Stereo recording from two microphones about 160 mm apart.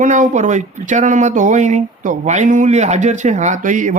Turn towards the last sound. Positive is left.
turn(degrees=-55)  # may be behind; listen again after turning